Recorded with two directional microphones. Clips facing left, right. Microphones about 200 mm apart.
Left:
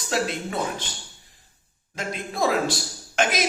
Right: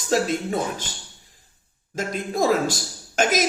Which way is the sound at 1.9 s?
45° right (ahead or behind).